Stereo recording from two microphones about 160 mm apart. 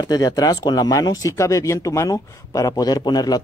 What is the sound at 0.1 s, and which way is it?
Speech, 25° left (ahead or behind).